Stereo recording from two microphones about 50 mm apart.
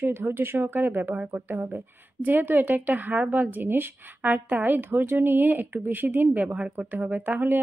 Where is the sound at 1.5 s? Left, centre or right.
Right.